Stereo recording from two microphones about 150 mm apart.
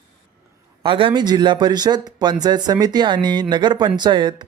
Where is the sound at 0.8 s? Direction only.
35° right (ahead or behind).